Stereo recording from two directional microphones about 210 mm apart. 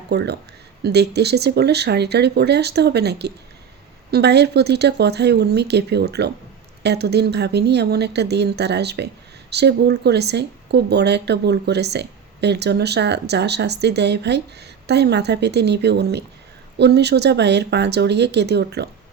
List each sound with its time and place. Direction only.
0.1 s speech: 50° right (ahead or behind)